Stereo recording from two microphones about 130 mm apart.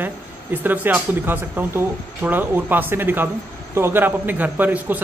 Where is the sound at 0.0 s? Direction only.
15° right (ahead or behind).